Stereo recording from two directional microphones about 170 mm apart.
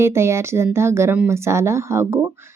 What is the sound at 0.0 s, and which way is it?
Speech, 15° right (ahead or behind).